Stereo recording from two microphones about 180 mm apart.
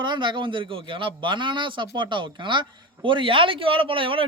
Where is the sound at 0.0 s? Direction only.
25° right (ahead or behind).